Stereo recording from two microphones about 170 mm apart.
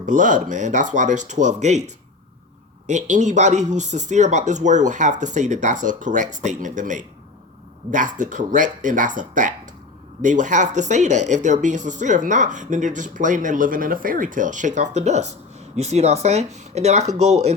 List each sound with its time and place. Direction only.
0.0 s speech: 50° right (ahead or behind)
2.8 s speech: 45° right (ahead or behind)